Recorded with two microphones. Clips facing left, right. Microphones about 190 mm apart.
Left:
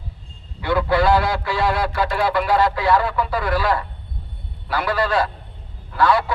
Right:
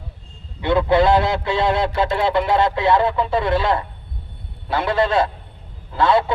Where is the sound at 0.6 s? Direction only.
20° right (ahead or behind).